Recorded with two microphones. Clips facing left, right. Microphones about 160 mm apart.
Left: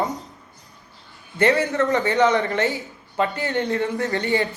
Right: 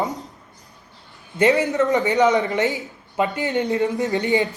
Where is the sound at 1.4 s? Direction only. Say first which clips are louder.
Right 2 dB; 20° right (ahead or behind).